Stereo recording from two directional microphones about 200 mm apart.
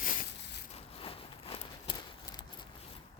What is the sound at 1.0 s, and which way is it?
Walk, 30° left (ahead or behind).